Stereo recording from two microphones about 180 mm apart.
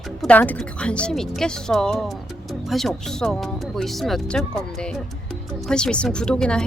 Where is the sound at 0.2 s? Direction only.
10° left (ahead or behind).